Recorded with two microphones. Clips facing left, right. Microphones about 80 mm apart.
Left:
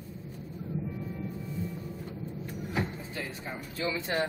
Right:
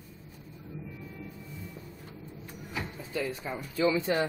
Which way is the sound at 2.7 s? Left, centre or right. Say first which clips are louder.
Left 5 dB; left.